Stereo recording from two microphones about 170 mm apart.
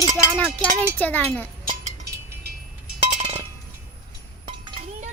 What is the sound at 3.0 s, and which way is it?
Music, 35° right (ahead or behind).